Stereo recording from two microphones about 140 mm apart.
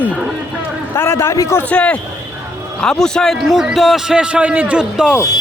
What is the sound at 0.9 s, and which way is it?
Speech, 20° left (ahead or behind).